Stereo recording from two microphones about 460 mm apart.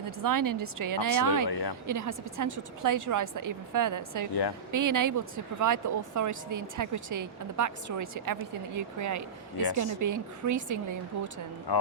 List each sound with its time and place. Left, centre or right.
0.2 s speech: right
1.5 s speech: left
1.9 s speech: right
11.7 s speech: left